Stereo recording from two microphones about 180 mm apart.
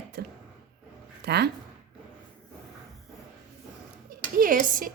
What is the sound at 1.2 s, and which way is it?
Speech, 65° right (ahead or behind).